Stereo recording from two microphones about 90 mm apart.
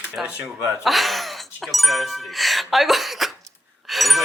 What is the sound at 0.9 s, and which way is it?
Speech, centre (ahead or behind).